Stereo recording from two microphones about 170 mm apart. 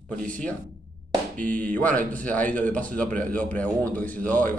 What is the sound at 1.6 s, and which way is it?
A man's voice, 10° left (ahead or behind).